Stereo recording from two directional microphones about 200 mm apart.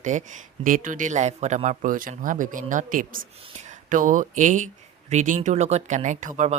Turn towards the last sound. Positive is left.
turn(degrees=-35)  # may be behind; listen again after turning